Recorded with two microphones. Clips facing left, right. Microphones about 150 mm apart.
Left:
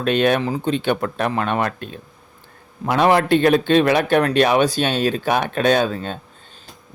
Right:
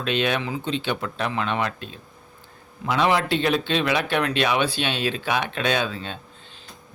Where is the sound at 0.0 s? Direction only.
50° left (ahead or behind).